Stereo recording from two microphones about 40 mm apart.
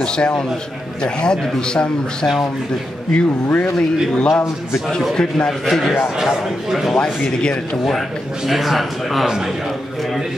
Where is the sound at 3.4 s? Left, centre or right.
Left.